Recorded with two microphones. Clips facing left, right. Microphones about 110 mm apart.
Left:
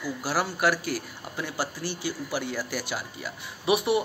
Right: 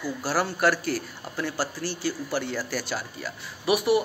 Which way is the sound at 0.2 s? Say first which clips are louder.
Right 2 dB; 15° left (ahead or behind).